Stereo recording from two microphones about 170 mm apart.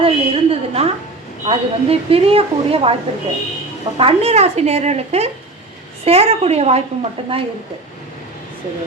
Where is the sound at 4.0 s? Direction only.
35° right (ahead or behind).